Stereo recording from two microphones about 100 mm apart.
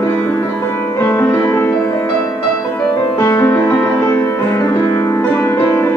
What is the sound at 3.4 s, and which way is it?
Music, 20° left (ahead or behind).